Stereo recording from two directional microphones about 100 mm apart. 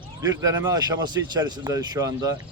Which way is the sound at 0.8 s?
45° right (ahead or behind).